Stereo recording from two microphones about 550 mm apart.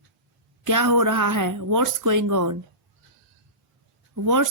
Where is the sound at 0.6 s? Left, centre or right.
Right.